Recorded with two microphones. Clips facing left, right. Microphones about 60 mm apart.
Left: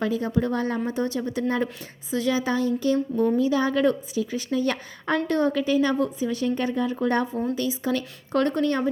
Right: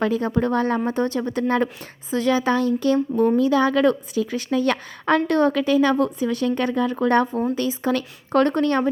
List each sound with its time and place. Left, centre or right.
0.0 s speech: right
3.3 s a woman's voice: right
7.5 s speech: right